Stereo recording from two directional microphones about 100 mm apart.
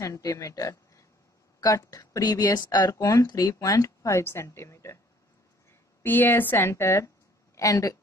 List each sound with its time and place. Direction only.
0.0 s a woman's voice: 35° left (ahead or behind)